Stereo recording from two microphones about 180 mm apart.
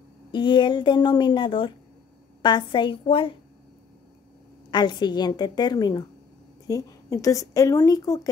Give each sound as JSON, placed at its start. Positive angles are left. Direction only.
{"t": 0.3, "sound": "a woman's voice", "side_deg": 25}
{"t": 4.6, "sound": "a woman's voice", "side_deg": 25}